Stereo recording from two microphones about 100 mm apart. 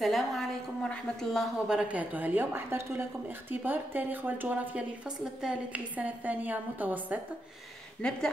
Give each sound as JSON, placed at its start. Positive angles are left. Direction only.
{"t": 0.0, "sound": "a woman's voice", "side_deg": 0}
{"t": 8.0, "sound": "speech", "side_deg": 10}